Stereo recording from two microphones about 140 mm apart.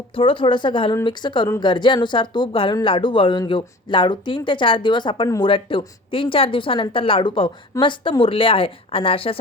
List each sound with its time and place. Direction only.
0.2 s speech: 40° left (ahead or behind)